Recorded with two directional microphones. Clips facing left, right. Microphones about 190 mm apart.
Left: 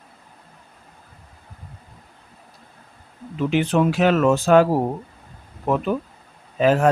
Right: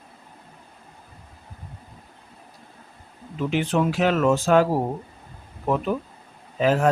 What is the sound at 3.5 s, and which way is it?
Speech, 65° left (ahead or behind).